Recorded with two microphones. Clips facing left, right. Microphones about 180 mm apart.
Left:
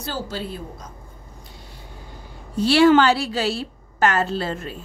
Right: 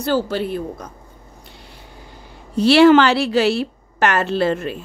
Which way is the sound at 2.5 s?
70° right (ahead or behind).